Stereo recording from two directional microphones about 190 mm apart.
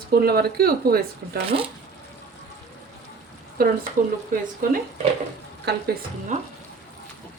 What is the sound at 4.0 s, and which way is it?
Speech, 45° right (ahead or behind).